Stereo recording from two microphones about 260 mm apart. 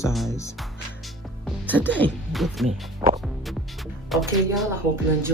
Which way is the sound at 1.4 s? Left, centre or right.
Centre.